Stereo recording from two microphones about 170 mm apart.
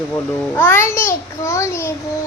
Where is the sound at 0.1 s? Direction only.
10° left (ahead or behind).